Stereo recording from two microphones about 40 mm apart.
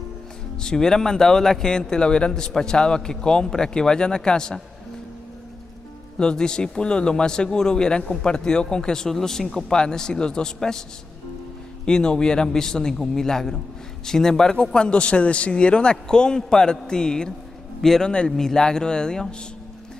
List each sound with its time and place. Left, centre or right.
0.6 s speech: centre
6.1 s a man's voice: centre
9.7 s a man's voice: centre
11.8 s a man's voice: centre